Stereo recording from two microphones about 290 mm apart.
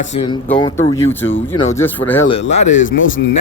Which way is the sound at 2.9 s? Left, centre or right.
Left.